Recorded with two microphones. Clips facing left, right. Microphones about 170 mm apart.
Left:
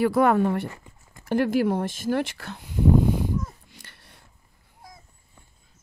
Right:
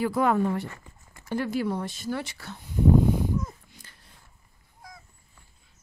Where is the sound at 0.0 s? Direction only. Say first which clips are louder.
Left 4 dB; 65° left (ahead or behind); by 3.3 s 90° left.